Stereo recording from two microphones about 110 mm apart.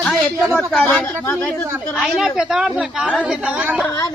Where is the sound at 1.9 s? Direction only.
Centre (ahead or behind).